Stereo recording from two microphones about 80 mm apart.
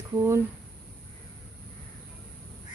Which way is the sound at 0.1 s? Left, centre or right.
Right.